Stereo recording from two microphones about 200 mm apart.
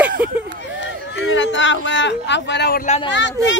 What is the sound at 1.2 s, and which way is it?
Speech, 65° left (ahead or behind).